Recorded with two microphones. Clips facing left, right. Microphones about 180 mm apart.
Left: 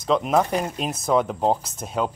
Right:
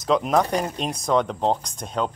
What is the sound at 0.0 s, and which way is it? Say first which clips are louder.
Speech: even; centre (ahead or behind).